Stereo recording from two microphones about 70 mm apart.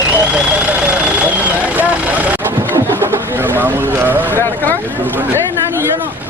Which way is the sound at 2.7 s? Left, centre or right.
Right.